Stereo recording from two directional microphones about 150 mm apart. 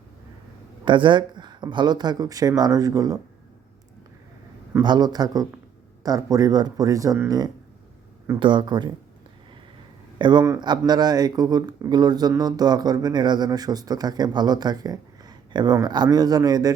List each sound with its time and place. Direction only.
0.9 s speech: 30° right (ahead or behind)
4.8 s speech: 30° right (ahead or behind)
10.2 s speech: 30° right (ahead or behind)